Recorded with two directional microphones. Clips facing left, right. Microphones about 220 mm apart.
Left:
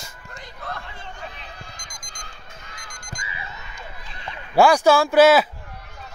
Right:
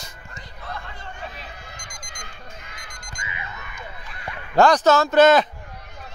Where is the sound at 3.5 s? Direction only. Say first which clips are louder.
Right 1 dB; 25° left (ahead or behind).